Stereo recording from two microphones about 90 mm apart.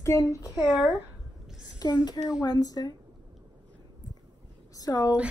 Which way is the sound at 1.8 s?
50° left (ahead or behind).